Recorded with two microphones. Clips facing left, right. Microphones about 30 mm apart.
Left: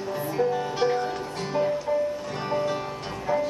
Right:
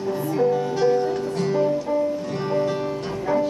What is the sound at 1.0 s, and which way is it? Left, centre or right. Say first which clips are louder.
Music: right 7 dB; centre.